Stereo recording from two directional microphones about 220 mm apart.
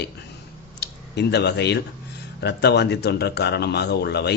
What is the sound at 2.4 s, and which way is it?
Speech, 50° left (ahead or behind).